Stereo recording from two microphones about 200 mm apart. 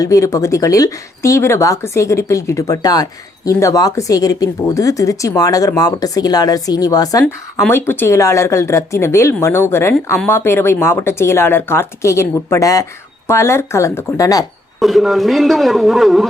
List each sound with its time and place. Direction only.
0.0 s speech: 15° left (ahead or behind)
14.8 s a man's voice: centre (ahead or behind)